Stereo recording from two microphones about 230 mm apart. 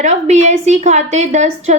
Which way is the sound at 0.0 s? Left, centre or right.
Right.